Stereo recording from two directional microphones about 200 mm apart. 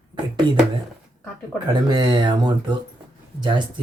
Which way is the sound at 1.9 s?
20° right (ahead or behind).